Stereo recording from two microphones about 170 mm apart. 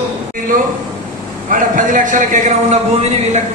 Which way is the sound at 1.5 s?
50° right (ahead or behind).